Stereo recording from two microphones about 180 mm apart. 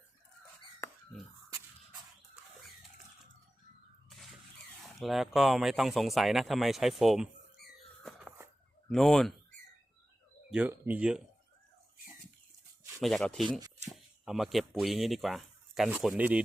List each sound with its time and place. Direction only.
0.8 s a sound: 10° left (ahead or behind)
4.9 s speech: centre (ahead or behind)
7.6 s a sound: 60° left (ahead or behind)
8.9 s speech: 5° left (ahead or behind)
10.5 s speech: 10° right (ahead or behind)
13.0 s speech: centre (ahead or behind)